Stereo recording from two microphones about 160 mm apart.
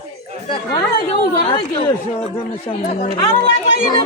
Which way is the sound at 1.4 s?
35° left (ahead or behind).